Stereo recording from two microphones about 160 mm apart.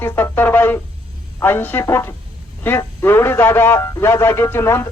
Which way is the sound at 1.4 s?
15° left (ahead or behind).